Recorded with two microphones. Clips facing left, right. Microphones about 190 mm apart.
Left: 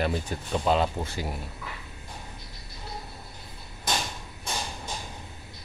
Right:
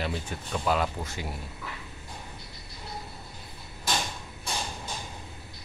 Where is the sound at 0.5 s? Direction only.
25° left (ahead or behind).